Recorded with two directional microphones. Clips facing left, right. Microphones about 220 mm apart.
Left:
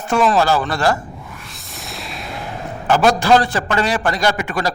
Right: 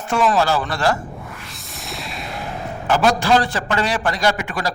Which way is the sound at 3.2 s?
50° left (ahead or behind).